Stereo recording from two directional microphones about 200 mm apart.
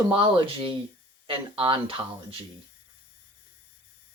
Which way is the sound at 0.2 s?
25° right (ahead or behind).